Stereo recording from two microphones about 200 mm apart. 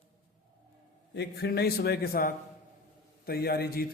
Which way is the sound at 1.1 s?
55° left (ahead or behind).